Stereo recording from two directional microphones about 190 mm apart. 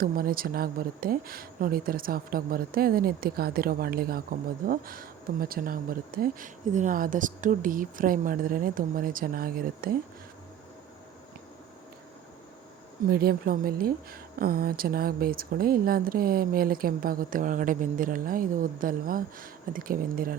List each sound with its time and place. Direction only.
0.0 s speech: 50° right (ahead or behind)
13.1 s speech: 50° right (ahead or behind)